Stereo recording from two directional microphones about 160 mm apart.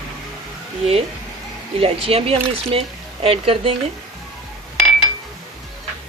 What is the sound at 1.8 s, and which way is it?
Speech, 35° right (ahead or behind).